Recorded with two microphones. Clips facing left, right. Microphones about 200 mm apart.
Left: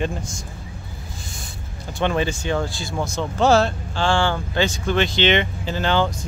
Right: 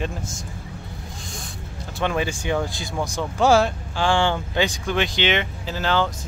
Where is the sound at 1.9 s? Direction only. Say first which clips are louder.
Left 2 dB; 5° right (ahead or behind).